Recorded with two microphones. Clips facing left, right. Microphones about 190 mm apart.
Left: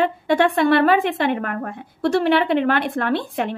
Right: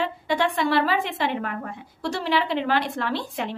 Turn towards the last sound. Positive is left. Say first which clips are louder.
# left 6 dB
turn(degrees=55)  # may be behind; listen again after turning